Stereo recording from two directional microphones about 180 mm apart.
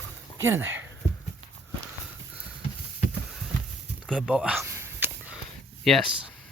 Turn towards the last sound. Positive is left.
turn(degrees=0)  # may be behind; listen again after turning